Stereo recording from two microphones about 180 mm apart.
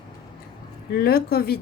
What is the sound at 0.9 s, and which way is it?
Speech, 60° left (ahead or behind).